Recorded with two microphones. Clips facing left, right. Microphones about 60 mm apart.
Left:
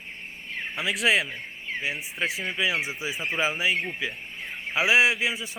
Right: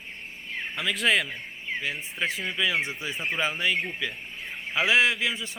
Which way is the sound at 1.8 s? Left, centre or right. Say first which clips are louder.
Left 2 dB; centre.